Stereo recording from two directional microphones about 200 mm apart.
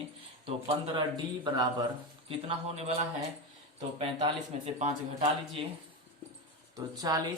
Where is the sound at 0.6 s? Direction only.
30° right (ahead or behind).